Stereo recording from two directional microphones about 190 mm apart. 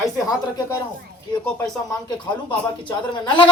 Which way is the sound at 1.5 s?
20° left (ahead or behind).